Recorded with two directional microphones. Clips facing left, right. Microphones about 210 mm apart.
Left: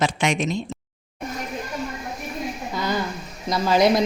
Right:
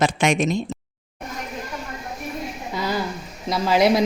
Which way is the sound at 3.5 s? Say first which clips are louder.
Even; 5° right (ahead or behind).